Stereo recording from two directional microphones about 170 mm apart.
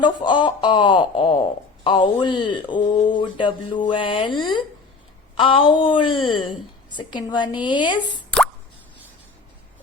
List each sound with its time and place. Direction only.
0.0 s speech: 25° left (ahead or behind)